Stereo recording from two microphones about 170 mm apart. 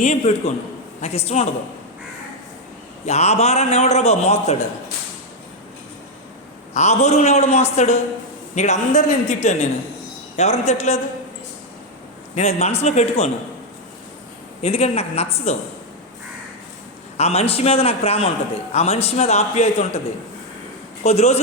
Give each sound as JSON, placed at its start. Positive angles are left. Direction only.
{"t": 0.0, "sound": "a man's voice", "side_deg": 40}
{"t": 3.1, "sound": "a man's voice", "side_deg": 40}
{"t": 6.7, "sound": "a man's voice", "side_deg": 40}
{"t": 12.3, "sound": "a man's voice", "side_deg": 40}
{"t": 14.6, "sound": "a man's voice", "side_deg": 40}
{"t": 17.2, "sound": "a man's voice", "side_deg": 35}
{"t": 21.0, "sound": "a man's voice", "side_deg": 40}